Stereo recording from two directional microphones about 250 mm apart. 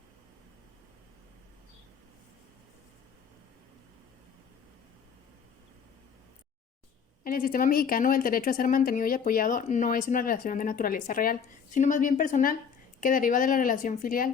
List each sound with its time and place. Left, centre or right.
7.3 s a woman's voice: left